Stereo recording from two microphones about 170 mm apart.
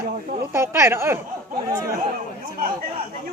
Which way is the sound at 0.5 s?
15° right (ahead or behind).